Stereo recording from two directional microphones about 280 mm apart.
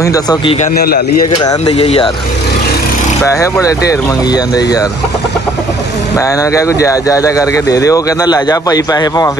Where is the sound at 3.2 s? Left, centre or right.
Centre.